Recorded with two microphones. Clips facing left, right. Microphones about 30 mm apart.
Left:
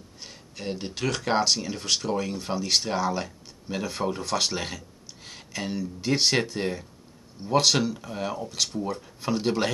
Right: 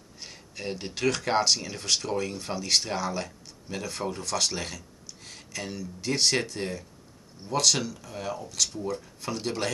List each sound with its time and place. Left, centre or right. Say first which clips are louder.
0.2 s speech: even; centre